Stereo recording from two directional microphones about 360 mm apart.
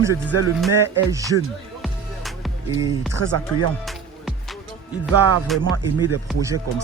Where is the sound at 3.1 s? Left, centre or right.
Right.